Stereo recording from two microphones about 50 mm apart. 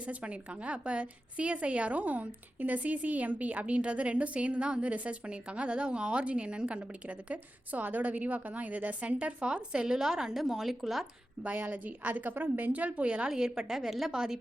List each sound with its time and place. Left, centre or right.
0.0 s a woman's voice: right; by 11.0 s centre
11.4 s a woman's voice: right; by 14.3 s centre